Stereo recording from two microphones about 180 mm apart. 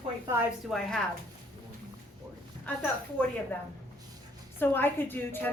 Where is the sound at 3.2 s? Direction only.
10° left (ahead or behind).